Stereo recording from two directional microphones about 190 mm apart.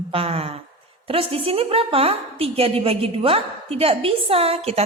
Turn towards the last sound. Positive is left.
turn(degrees=-30)  # may be behind; listen again after turning